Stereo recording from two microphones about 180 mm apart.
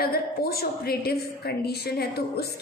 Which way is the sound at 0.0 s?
60° left (ahead or behind).